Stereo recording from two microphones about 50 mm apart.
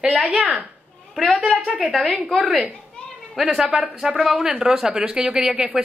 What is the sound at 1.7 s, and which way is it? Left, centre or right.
Speech, centre.